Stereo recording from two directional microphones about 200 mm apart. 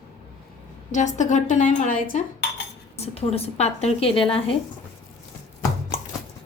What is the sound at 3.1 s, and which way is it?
A woman's voice, 30° left (ahead or behind).